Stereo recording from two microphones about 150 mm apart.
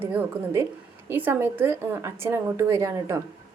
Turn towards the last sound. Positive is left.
turn(degrees=-20)  # may be behind; listen again after turning